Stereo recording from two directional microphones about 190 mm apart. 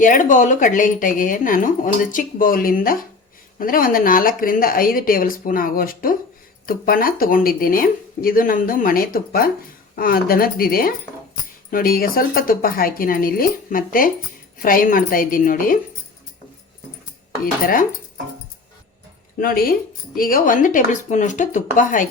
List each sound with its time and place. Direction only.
0.0 s speech: 40° left (ahead or behind)
17.4 s speech: 50° left (ahead or behind)
19.4 s speech: 50° left (ahead or behind)